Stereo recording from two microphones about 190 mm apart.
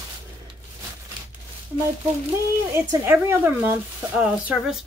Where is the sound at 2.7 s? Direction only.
10° right (ahead or behind).